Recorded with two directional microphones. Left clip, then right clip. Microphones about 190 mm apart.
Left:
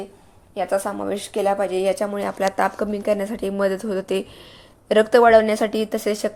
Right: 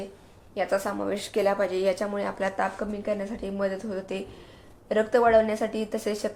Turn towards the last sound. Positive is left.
turn(degrees=30)  # may be behind; listen again after turning